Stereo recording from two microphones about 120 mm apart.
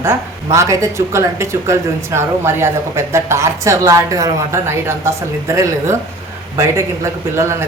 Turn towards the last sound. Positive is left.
turn(degrees=-25)  # may be behind; listen again after turning